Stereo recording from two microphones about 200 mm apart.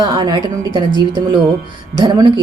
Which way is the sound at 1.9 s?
20° right (ahead or behind).